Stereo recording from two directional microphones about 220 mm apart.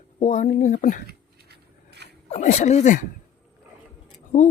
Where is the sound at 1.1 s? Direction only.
50° right (ahead or behind).